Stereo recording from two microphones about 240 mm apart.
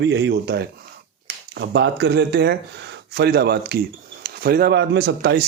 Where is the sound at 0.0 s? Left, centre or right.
Right.